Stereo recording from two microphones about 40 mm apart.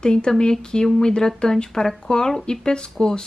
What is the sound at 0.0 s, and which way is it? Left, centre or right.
Speech, centre.